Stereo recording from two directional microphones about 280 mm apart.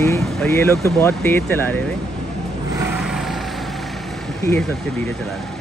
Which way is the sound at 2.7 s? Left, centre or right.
Centre.